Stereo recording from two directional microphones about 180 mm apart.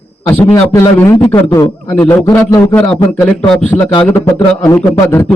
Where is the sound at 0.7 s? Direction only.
15° left (ahead or behind).